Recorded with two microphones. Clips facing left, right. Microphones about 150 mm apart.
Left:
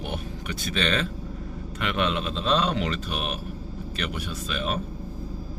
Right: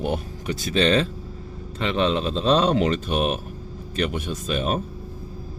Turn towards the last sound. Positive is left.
turn(degrees=-45)  # may be behind; listen again after turning